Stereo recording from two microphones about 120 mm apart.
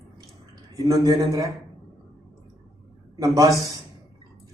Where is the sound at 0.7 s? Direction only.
30° right (ahead or behind).